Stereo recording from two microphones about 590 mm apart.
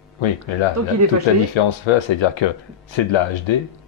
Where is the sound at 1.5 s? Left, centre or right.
Left.